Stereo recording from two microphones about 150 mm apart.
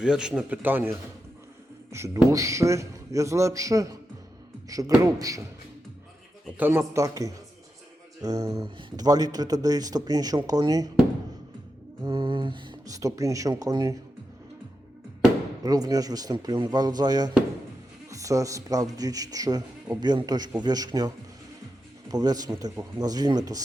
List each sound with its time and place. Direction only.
0.0 s a man's voice: 5° right (ahead or behind); by 3.9 s 20° right (ahead or behind)
5.0 s speech: 25° right (ahead or behind)
6.6 s speech: 15° right (ahead or behind)
12.0 s speech: 35° right (ahead or behind)
15.6 s speech: 25° right (ahead or behind)
22.1 s speech: 25° right (ahead or behind)